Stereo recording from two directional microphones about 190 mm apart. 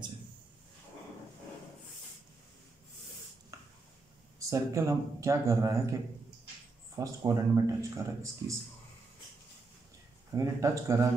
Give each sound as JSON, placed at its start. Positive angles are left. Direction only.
{"t": 3.5, "sound": "a sound", "side_deg": -15}
{"t": 4.4, "sound": "speech", "side_deg": -15}
{"t": 7.0, "sound": "speech", "side_deg": -15}
{"t": 10.3, "sound": "speech", "side_deg": -15}